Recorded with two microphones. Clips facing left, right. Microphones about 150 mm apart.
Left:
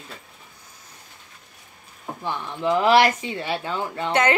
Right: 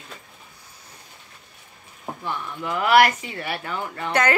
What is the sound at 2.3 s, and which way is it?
Speech, 25° left (ahead or behind).